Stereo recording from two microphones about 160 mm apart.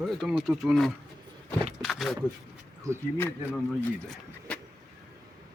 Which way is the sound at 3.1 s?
15° left (ahead or behind).